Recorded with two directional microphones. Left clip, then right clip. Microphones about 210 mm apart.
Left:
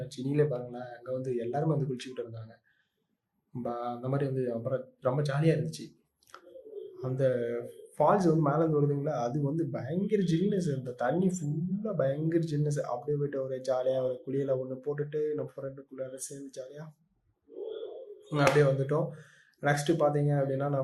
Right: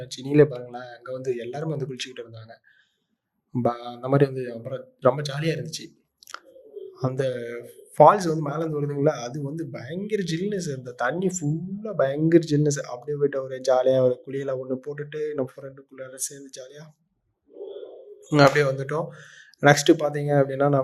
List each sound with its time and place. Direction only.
0.0 s speech: 45° right (ahead or behind)
3.6 s speech: 50° right (ahead or behind)
7.0 s speech: 45° right (ahead or behind)
18.3 s speech: 45° right (ahead or behind)